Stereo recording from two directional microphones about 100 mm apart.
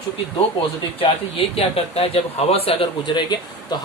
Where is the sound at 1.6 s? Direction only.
80° left.